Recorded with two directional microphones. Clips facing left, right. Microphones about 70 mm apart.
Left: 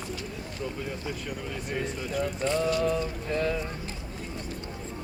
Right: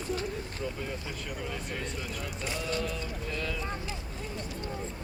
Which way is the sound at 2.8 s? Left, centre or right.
Left.